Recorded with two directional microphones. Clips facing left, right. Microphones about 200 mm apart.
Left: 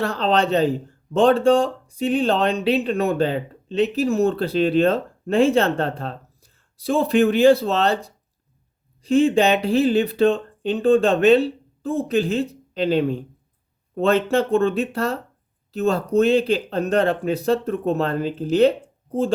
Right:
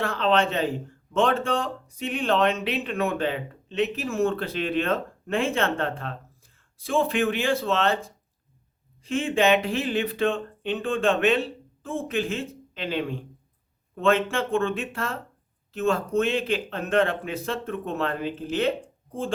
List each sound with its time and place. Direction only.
0.0 s speech: 35° left (ahead or behind)